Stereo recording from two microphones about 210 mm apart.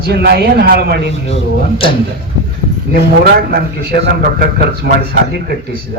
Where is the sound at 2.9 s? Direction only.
50° right (ahead or behind).